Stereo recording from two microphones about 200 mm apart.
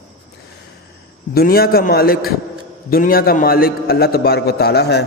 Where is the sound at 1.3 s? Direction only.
50° left (ahead or behind).